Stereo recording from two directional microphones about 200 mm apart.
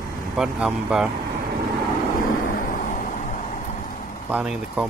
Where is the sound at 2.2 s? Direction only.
45° left (ahead or behind).